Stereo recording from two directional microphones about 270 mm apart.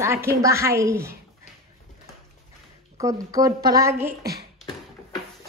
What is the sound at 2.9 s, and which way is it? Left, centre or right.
A woman's voice, centre.